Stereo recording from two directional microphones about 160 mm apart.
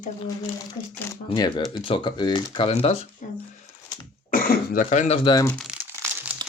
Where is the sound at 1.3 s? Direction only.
30° left (ahead or behind).